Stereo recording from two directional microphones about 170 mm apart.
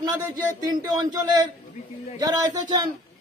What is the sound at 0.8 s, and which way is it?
A man's voice, 25° right (ahead or behind).